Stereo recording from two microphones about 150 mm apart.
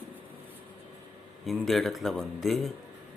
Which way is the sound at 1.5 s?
Centre (ahead or behind).